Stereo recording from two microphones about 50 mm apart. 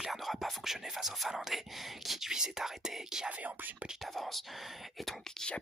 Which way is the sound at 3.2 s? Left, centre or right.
Right.